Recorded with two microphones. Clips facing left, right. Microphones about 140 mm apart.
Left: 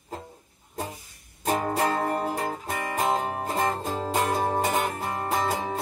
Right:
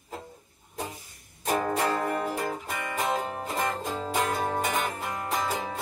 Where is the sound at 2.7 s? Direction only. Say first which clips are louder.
Left 3 dB; 40° left (ahead or behind).